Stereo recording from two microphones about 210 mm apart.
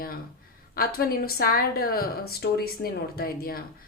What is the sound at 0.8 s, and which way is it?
Speech, 45° left (ahead or behind).